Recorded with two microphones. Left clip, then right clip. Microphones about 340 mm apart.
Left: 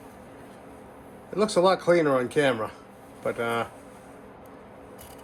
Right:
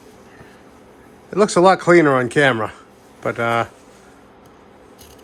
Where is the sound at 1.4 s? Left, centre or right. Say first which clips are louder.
Right 9 dB; right.